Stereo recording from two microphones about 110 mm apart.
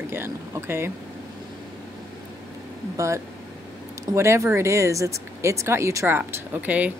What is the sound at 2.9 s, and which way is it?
Speech, 25° right (ahead or behind).